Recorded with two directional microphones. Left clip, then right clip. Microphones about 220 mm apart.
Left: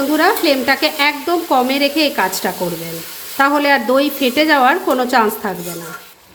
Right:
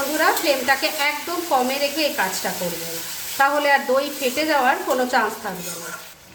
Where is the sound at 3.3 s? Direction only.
40° left (ahead or behind).